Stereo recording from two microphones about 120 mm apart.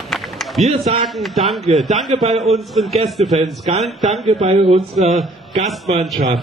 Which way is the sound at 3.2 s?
60° right (ahead or behind).